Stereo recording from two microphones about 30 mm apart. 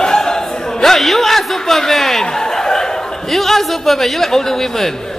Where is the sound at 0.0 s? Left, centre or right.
Centre.